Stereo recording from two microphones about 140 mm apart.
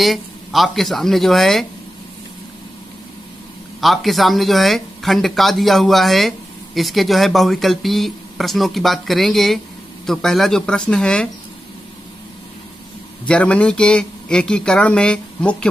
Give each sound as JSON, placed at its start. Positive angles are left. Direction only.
{"t": 0.0, "sound": "speech", "side_deg": 0}
{"t": 3.8, "sound": "speech", "side_deg": 0}
{"t": 13.3, "sound": "speech", "side_deg": 10}